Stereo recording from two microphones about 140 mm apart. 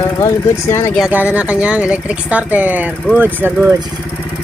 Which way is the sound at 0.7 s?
20° left (ahead or behind).